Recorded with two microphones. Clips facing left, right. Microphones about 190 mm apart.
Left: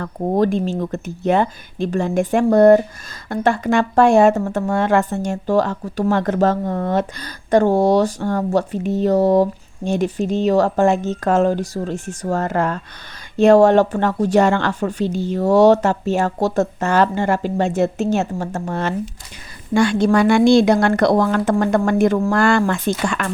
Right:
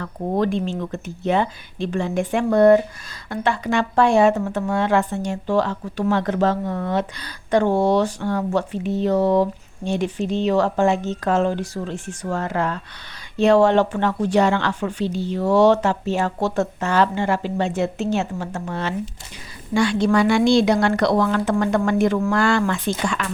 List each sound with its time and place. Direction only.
0.0 s speech: 45° left (ahead or behind)